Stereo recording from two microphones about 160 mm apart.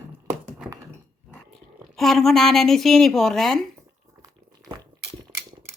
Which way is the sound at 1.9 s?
Centre (ahead or behind).